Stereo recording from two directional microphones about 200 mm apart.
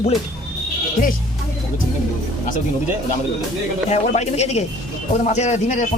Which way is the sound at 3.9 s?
35° left (ahead or behind).